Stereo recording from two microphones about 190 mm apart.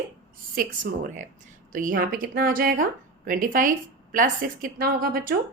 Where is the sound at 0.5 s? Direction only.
45° right (ahead or behind).